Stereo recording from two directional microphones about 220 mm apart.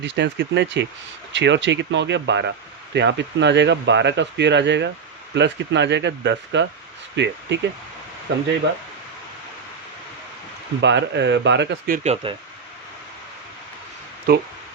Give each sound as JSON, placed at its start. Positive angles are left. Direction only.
{"t": 0.0, "sound": "speech", "side_deg": -55}
{"t": 10.8, "sound": "speech", "side_deg": -55}
{"t": 12.0, "sound": "speech", "side_deg": -25}